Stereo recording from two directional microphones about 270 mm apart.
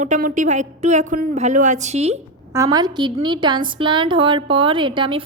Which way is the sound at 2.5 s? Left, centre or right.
Centre.